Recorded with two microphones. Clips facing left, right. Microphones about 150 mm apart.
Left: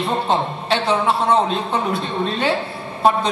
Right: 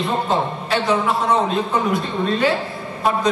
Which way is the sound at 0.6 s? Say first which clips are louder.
Left 2 dB; 30° left (ahead or behind).